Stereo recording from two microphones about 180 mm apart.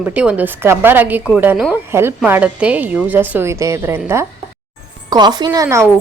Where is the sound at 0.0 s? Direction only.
5° right (ahead or behind).